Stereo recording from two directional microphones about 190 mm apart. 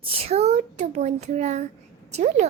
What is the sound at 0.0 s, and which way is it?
A woman's voice, 30° right (ahead or behind).